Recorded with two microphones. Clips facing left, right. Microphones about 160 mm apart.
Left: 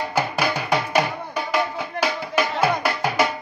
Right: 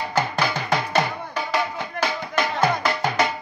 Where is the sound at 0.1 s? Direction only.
10° left (ahead or behind).